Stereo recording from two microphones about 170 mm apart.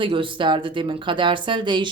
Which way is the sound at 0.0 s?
30° right (ahead or behind).